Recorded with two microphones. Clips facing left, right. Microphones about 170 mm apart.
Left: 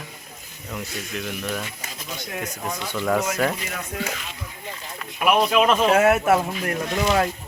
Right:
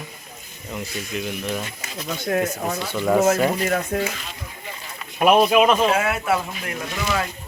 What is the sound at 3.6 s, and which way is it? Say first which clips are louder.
Speech: right 9 dB; 50° right (ahead or behind).